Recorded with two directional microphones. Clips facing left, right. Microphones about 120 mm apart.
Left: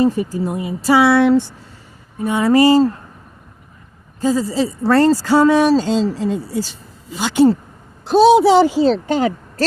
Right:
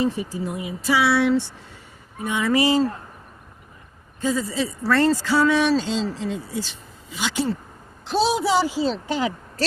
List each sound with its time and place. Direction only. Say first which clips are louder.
0.0 s speech: left 7 dB; 45° left (ahead or behind)
4.2 s a woman's voice: left 6 dB; 30° left (ahead or behind); by 8.3 s 50° left (ahead or behind)
8.3 s a woman's voice: left 10 dB; 70° left (ahead or behind); by 9.6 s 55° left (ahead or behind)